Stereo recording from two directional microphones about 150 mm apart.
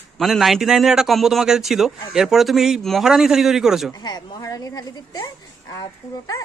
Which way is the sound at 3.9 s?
30° left (ahead or behind).